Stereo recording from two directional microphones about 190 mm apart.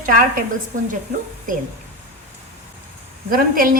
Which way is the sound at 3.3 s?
50° right (ahead or behind).